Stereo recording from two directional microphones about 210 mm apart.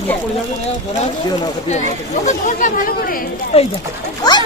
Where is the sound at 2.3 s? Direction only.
40° left (ahead or behind).